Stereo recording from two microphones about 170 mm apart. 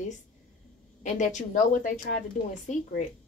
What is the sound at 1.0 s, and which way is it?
Speech, 45° left (ahead or behind).